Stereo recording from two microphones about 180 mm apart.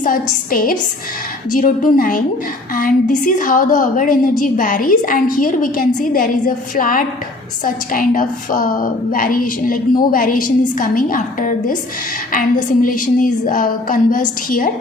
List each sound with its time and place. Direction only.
0.0 s a woman's voice: 50° left (ahead or behind)